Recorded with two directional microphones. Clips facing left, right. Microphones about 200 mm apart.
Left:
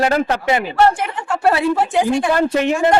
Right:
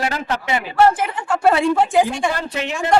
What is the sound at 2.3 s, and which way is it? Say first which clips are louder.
Speech: left 9 dB; 50° left (ahead or behind).